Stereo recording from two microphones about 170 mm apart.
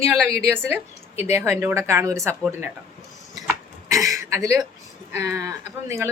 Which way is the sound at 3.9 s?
20° right (ahead or behind).